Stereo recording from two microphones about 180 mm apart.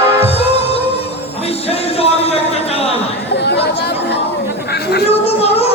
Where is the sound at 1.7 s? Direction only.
35° left (ahead or behind).